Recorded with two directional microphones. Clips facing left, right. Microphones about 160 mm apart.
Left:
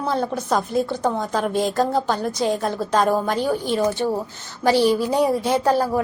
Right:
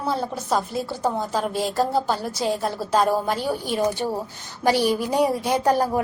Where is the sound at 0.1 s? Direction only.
5° right (ahead or behind).